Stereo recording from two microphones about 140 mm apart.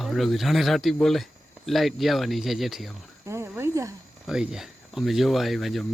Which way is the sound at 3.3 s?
15° right (ahead or behind).